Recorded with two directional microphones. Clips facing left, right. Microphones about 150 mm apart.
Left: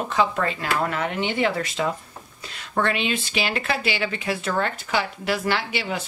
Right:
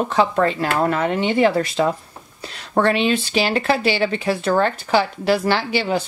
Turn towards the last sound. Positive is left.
turn(degrees=-30)  # may be behind; listen again after turning